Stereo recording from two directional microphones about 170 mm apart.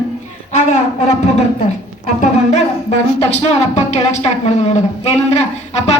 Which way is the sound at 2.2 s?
40° left (ahead or behind).